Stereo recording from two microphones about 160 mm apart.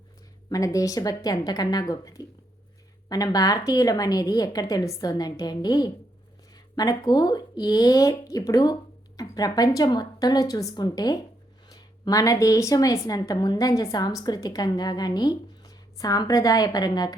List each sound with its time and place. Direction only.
0.5 s speech: 20° left (ahead or behind)